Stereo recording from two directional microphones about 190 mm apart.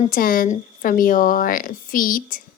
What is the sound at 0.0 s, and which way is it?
A woman's voice, 50° left (ahead or behind).